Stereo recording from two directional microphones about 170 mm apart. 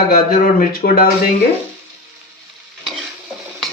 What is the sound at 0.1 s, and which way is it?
Speech, 55° left (ahead or behind).